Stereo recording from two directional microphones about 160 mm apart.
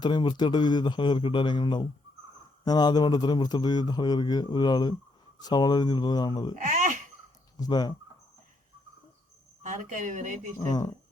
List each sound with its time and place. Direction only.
0.0 s speech: 30° left (ahead or behind)
6.6 s a sound: 50° right (ahead or behind)
7.7 s speech: 25° left (ahead or behind)
9.6 s speech: 55° right (ahead or behind)
10.7 s speech: 25° left (ahead or behind)